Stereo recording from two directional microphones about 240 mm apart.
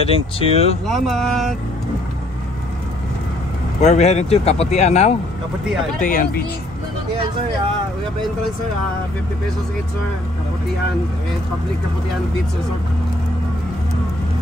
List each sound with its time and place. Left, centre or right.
0.0 s speech: left
0.8 s speech: centre
3.8 s speech: left